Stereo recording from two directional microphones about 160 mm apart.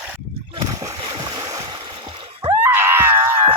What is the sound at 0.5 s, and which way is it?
Splash, 25° right (ahead or behind).